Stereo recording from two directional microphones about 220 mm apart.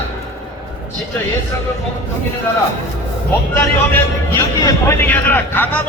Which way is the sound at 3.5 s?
10° left (ahead or behind).